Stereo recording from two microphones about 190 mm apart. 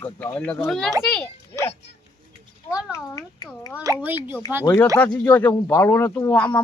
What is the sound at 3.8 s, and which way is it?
Speech, 10° right (ahead or behind).